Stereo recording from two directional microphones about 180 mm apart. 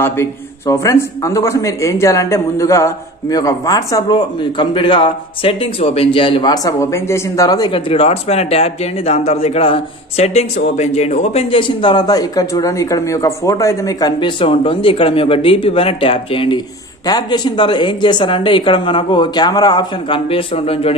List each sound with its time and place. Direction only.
0.0 s speech: 15° left (ahead or behind)
7.9 s speech: 35° left (ahead or behind)